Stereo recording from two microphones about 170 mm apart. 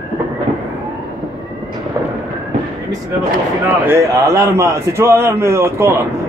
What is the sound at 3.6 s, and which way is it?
A man's voice, 15° right (ahead or behind).